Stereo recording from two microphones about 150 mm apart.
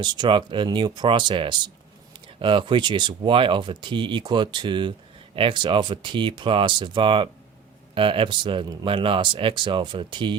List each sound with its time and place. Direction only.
0.0 s speech: 30° right (ahead or behind)